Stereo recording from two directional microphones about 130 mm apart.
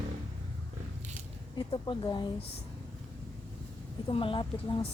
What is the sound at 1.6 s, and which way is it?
Speech, 35° left (ahead or behind).